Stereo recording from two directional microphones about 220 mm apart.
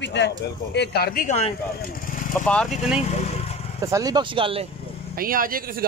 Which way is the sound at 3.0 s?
30° left (ahead or behind).